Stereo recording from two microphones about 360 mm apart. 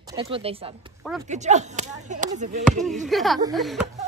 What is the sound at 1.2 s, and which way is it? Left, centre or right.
Speech, centre.